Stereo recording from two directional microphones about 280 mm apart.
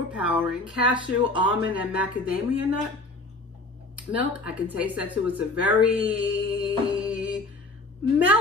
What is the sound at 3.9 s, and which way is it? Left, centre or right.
Speech, centre.